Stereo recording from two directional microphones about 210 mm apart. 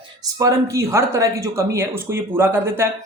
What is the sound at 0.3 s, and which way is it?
Speech, 15° right (ahead or behind).